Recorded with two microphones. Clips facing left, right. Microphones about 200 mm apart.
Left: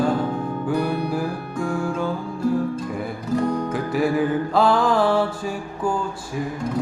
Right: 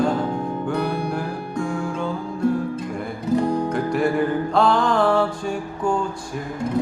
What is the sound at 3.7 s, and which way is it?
Music, 5° left (ahead or behind).